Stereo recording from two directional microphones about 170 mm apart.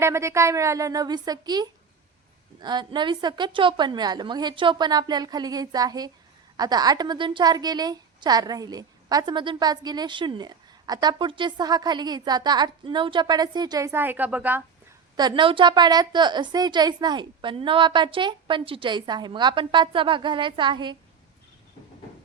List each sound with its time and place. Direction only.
0.0 s a woman's voice: 15° right (ahead or behind)
15.1 s a woman's voice: 25° right (ahead or behind)